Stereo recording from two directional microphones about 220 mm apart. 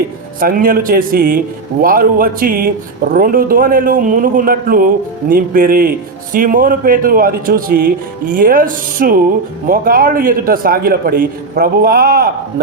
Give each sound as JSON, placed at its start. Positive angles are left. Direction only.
{"t": 0.3, "sound": "a man's voice", "side_deg": -40}